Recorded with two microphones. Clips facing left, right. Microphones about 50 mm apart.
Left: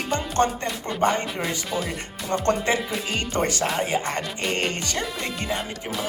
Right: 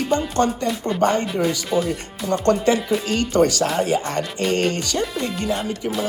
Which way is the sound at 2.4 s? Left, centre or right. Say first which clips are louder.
Right 5 dB; left.